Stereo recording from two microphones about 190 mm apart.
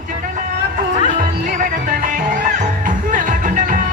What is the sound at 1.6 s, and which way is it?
Music, 45° right (ahead or behind).